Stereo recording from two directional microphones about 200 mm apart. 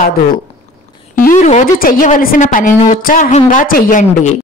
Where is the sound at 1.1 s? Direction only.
45° left (ahead or behind).